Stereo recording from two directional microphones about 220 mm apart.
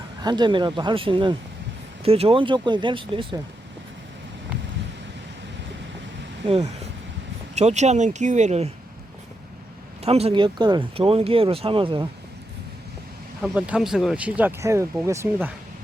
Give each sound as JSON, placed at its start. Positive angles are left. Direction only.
{"t": 0.2, "sound": "speech", "side_deg": -20}
{"t": 7.5, "sound": "speech", "side_deg": -30}
{"t": 10.0, "sound": "speech", "side_deg": -25}
{"t": 13.4, "sound": "speech", "side_deg": -5}